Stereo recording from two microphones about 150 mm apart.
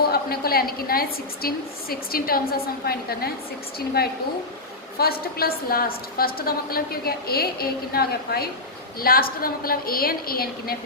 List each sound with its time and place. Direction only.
0.1 s a woman's voice: 90° left
9.0 s a woman's voice: 80° left